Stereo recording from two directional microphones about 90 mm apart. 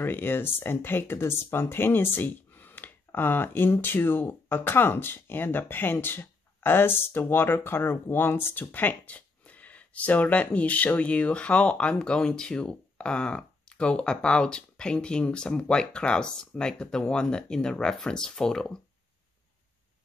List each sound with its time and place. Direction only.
0.0 s speech: 25° left (ahead or behind); by 18.8 s 5° left (ahead or behind)